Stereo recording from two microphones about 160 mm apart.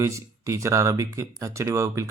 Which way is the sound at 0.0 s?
20° right (ahead or behind).